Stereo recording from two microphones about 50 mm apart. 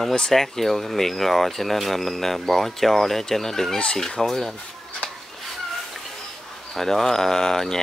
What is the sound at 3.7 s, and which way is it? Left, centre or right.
Speech, centre.